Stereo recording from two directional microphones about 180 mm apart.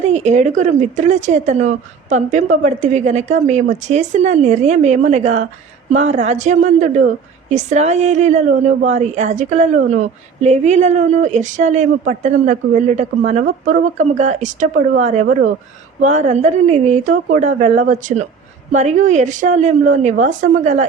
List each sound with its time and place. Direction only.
0.1 s a woman's voice: 40° right (ahead or behind)